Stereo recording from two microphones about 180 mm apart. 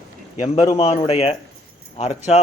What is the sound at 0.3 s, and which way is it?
A man's voice, 30° left (ahead or behind).